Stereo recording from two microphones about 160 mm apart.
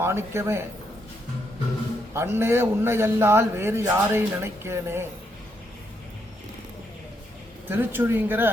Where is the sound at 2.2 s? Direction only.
15° right (ahead or behind).